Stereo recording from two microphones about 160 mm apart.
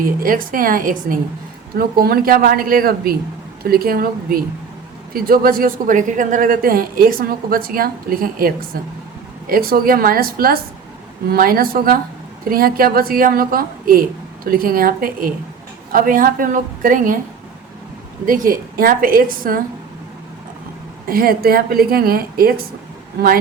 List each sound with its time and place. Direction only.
0.0 s a woman's voice: 60° right (ahead or behind)
1.7 s a woman's voice: 70° right (ahead or behind)
18.3 s a woman's voice: 60° right (ahead or behind)
21.1 s a woman's voice: 70° right (ahead or behind)